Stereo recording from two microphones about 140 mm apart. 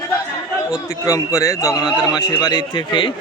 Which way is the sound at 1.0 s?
25° left (ahead or behind).